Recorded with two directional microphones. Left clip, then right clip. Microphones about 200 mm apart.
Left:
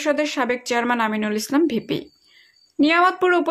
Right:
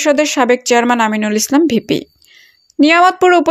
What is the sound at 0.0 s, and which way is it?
Speech, 35° right (ahead or behind).